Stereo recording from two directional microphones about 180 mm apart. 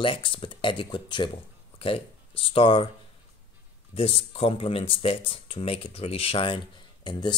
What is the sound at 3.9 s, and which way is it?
Speech, 30° left (ahead or behind).